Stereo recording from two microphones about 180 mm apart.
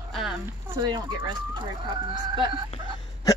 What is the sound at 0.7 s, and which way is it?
Speech, 25° right (ahead or behind).